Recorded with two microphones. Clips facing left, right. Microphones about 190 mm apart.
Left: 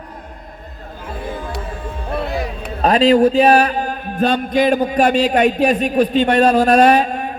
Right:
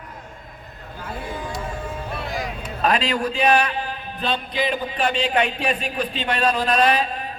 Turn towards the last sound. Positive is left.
turn(degrees=50)  # may be behind; listen again after turning